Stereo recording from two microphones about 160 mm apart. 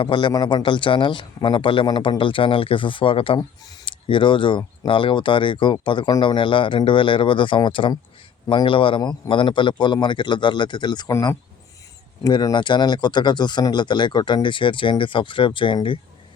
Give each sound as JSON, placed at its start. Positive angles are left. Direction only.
{"t": 0.0, "sound": "speech", "side_deg": 30}